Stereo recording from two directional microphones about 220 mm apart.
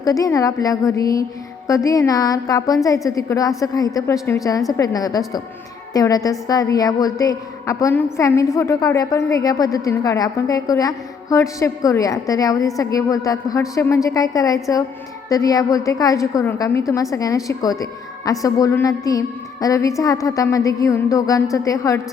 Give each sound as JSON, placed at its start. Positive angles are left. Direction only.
{"t": 0.0, "sound": "a woman's voice", "side_deg": 15}